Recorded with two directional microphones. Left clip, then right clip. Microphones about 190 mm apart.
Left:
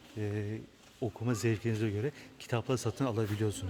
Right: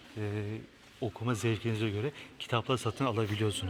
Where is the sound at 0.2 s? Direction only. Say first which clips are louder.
Even; 25° left (ahead or behind).